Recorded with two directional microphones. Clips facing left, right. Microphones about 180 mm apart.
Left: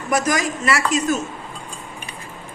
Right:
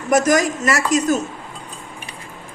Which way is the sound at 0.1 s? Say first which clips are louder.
Right 5 dB; 50° right (ahead or behind).